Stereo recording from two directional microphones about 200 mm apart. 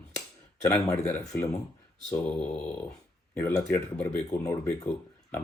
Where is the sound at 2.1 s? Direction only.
10° left (ahead or behind).